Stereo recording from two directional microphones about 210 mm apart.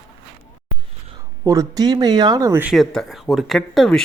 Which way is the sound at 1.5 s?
15° right (ahead or behind).